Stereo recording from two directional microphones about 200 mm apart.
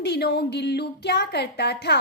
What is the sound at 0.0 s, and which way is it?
A woman's voice, 55° left (ahead or behind).